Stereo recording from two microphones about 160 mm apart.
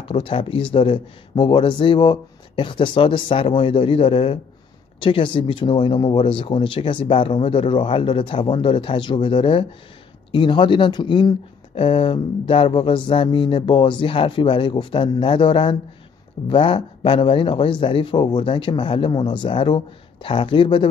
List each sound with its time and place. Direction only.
0.0 s speech: 35° left (ahead or behind)